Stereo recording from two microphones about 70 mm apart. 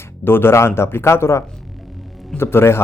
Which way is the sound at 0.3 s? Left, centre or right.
Left.